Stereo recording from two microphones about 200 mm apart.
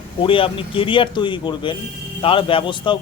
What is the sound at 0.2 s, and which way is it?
A man's voice, 25° left (ahead or behind).